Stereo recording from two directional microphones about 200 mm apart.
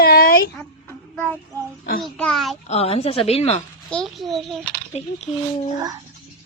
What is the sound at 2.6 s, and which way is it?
Speech, 30° left (ahead or behind).